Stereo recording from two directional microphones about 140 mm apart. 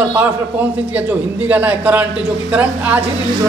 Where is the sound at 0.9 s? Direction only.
10° right (ahead or behind).